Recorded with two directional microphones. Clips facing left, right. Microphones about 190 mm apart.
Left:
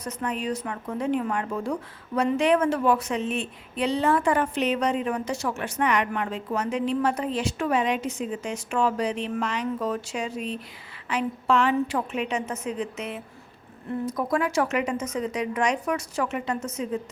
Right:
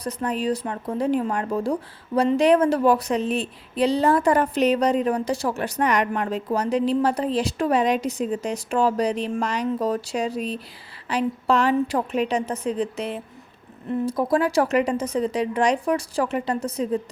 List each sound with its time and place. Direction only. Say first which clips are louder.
0.0 s a woman's voice: right 4 dB; 35° right (ahead or behind)